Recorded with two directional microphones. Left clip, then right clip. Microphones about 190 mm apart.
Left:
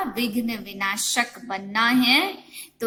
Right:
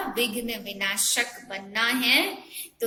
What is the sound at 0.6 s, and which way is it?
A woman's voice, 50° left (ahead or behind).